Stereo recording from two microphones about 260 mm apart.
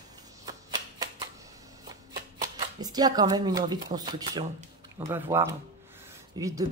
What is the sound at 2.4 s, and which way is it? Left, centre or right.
Speech, centre.